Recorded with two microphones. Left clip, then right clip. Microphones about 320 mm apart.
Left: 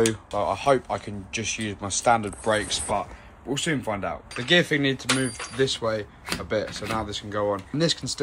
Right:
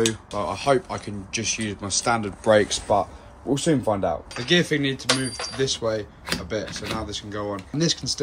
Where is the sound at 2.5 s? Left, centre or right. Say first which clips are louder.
Right 7 dB; right.